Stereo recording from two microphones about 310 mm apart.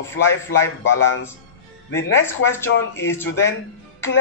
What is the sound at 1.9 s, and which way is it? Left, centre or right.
Speech, left.